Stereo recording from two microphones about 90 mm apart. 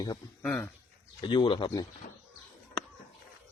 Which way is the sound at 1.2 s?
55° left (ahead or behind).